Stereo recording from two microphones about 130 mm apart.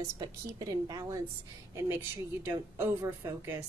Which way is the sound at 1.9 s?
15° right (ahead or behind).